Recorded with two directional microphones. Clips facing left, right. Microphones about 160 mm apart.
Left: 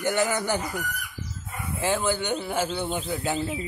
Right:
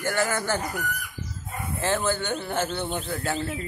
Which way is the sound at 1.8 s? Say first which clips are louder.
Even; 10° left (ahead or behind).